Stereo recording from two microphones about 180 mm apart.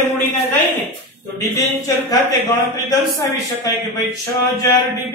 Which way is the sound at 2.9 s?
20° left (ahead or behind).